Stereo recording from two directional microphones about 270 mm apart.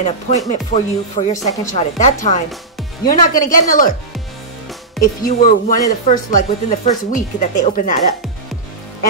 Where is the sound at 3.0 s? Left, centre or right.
Left.